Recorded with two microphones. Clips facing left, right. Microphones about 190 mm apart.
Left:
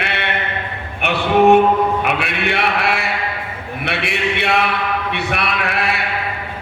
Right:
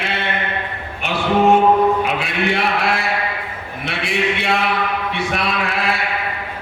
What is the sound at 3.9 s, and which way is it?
Speech, 65° left (ahead or behind).